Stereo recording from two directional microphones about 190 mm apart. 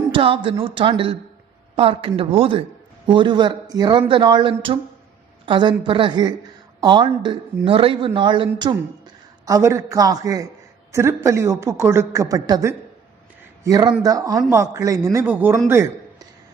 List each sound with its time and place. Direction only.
0.1 s a woman's voice: 30° right (ahead or behind)